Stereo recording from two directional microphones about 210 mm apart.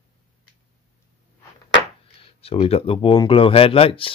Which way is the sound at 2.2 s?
25° left (ahead or behind).